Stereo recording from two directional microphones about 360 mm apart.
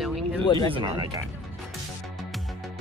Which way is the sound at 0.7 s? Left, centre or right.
Centre.